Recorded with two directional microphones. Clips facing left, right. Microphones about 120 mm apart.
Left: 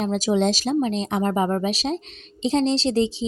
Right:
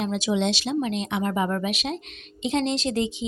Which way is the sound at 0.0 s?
40° left (ahead or behind).